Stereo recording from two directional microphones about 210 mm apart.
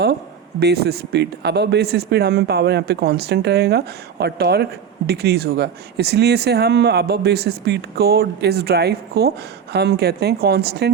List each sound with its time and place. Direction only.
0.6 s speech: 50° right (ahead or behind)